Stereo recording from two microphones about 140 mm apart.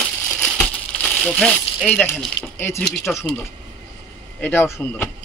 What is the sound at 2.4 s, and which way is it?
Speech, 20° left (ahead or behind).